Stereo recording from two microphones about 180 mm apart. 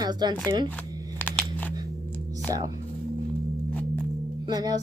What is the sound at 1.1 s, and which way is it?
Crunch, 10° left (ahead or behind).